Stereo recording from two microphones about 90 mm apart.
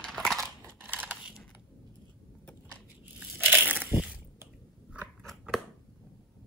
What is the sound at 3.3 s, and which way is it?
Crushing, 20° right (ahead or behind).